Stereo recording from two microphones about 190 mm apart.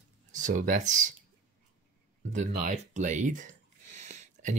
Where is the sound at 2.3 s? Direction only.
40° right (ahead or behind).